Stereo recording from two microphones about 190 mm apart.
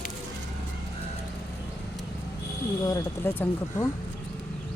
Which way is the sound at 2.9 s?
15° left (ahead or behind).